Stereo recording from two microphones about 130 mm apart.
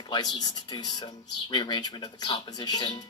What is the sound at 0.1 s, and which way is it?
Speech, 30° left (ahead or behind).